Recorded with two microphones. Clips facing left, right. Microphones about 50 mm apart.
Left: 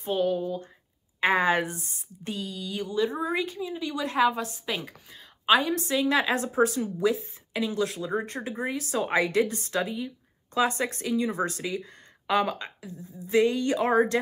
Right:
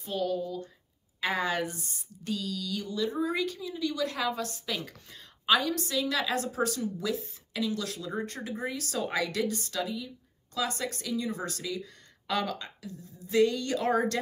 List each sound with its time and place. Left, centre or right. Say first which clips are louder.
0.0 s a woman's voice: left 5 dB; left